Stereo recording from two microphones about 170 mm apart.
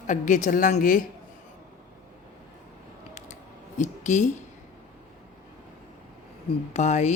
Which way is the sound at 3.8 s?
45° left (ahead or behind).